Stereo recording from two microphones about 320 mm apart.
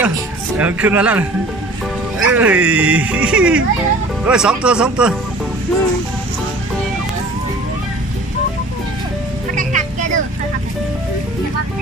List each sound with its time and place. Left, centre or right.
0.6 s speech: centre
9.6 s music: right